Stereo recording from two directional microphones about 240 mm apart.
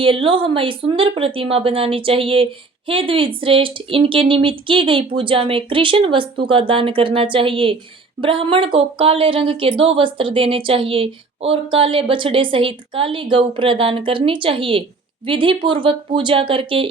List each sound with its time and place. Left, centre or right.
0.0 s speech: right